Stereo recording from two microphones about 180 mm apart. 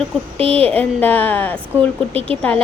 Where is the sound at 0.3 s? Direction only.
30° right (ahead or behind).